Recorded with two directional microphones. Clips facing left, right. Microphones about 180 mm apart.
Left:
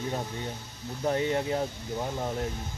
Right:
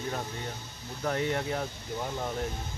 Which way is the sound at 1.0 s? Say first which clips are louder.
Left 3 dB; 20° left (ahead or behind).